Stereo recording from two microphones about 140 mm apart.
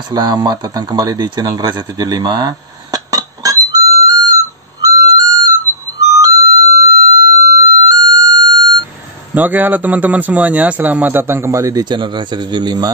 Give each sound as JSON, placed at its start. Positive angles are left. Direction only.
{"t": 0.1, "sound": "speech", "side_deg": -30}
{"t": 4.8, "sound": "flute", "side_deg": -25}
{"t": 6.1, "sound": "music", "side_deg": -25}
{"t": 9.3, "sound": "speech", "side_deg": -10}